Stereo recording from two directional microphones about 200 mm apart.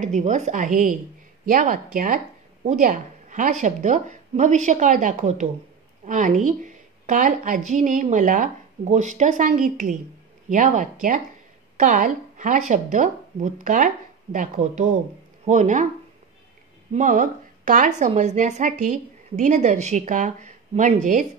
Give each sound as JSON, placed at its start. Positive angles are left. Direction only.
{"t": 0.0, "sound": "a woman's voice", "side_deg": -40}
{"t": 16.9, "sound": "a woman's voice", "side_deg": -40}